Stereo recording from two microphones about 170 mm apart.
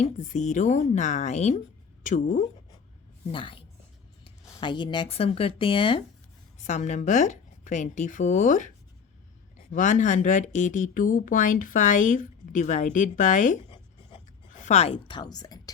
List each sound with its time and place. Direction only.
0.0 s speech: 45° left (ahead or behind)
3.3 s a woman's voice: 30° left (ahead or behind)
4.6 s a woman's voice: 25° left (ahead or behind)
6.6 s speech: 45° left (ahead or behind)
14.1 s writing: 30° left (ahead or behind)
14.5 s a woman's voice: 45° left (ahead or behind); by 15.7 s 25° left (ahead or behind)